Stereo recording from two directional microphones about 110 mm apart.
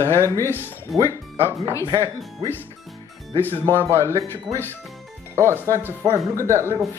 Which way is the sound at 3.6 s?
25° right (ahead or behind).